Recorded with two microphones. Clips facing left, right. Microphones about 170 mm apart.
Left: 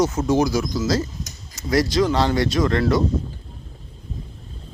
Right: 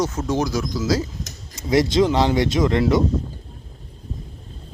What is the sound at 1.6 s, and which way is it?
Speech, 25° right (ahead or behind).